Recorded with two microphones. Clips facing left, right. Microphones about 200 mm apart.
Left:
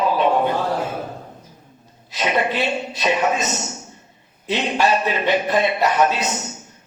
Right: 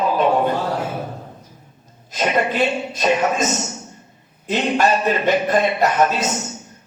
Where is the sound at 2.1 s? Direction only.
45° right (ahead or behind).